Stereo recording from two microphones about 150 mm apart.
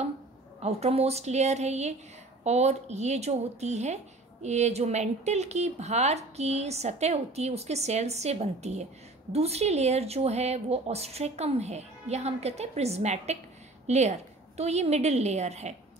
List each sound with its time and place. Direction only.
0.6 s a woman's voice: 45° right (ahead or behind)